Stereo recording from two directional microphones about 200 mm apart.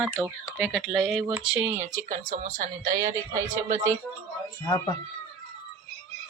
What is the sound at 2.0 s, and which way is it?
Speech, 45° right (ahead or behind).